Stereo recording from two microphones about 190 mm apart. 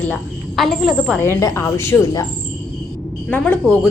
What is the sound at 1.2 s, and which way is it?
A woman's voice, 15° left (ahead or behind).